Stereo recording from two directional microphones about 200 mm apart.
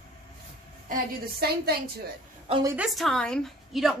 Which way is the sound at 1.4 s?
50° right (ahead or behind).